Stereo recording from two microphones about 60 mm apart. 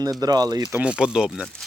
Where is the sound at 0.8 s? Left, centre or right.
Centre.